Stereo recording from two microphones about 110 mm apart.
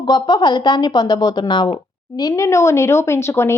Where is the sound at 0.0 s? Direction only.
40° left (ahead or behind).